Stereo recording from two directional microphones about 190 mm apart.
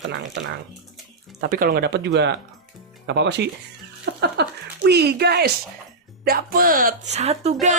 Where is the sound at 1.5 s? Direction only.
50° right (ahead or behind).